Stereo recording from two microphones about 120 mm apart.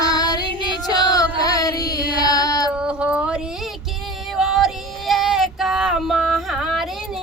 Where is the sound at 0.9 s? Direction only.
35° left (ahead or behind).